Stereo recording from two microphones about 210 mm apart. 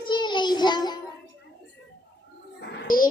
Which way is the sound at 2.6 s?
50° left (ahead or behind).